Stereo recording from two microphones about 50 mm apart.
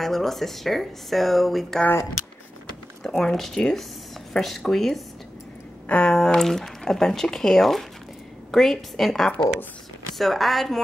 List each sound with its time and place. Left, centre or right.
0.0 s speech: centre
3.0 s speech: centre
5.9 s speech: left
6.1 s speech: centre